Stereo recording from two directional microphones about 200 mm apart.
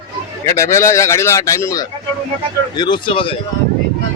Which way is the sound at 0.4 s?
15° left (ahead or behind).